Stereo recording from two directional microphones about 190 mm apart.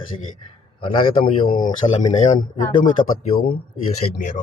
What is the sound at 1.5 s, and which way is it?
Speech, 45° left (ahead or behind).